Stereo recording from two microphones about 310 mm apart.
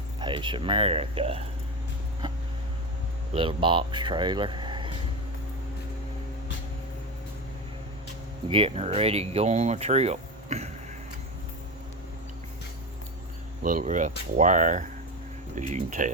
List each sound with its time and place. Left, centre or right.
0.2 s speech: centre
3.3 s speech: centre
8.4 s speech: centre
13.6 s speech: right